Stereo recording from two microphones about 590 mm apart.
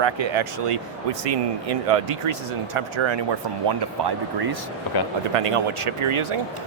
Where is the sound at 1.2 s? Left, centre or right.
Right.